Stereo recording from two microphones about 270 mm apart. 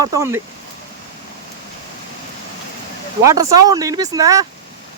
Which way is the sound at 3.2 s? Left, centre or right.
Centre.